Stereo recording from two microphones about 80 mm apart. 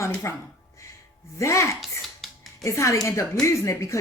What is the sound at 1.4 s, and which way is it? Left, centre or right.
Speech, left.